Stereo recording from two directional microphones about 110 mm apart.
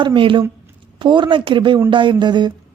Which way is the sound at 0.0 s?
50° right (ahead or behind).